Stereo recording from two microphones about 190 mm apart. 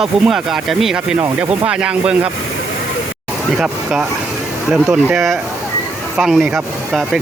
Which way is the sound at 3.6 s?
5° right (ahead or behind).